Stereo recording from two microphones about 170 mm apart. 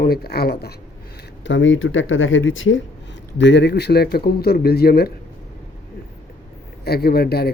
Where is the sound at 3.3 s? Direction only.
90° left; by 5.1 s 65° left (ahead or behind).